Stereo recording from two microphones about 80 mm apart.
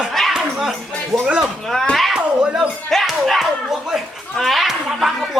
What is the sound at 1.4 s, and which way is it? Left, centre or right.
Speech, centre.